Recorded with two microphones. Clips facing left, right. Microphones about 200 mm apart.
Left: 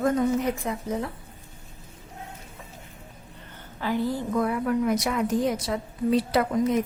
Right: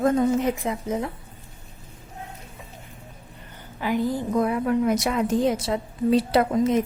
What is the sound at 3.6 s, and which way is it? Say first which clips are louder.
A woman's voice: right 2 dB; 15° right (ahead or behind).